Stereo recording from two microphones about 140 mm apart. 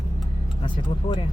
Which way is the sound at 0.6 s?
35° left (ahead or behind).